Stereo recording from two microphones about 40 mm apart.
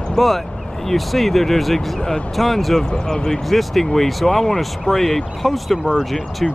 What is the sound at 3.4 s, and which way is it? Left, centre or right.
Speech, centre.